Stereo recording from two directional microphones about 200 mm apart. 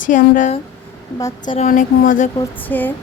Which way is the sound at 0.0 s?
40° left (ahead or behind).